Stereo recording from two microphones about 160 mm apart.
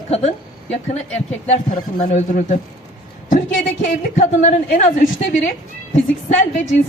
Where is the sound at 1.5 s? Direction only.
45° left (ahead or behind).